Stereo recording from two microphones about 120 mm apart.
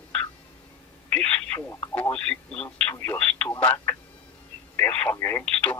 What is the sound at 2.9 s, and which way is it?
Radio, 20° left (ahead or behind).